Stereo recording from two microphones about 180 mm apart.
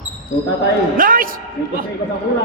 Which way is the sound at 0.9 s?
50° right (ahead or behind).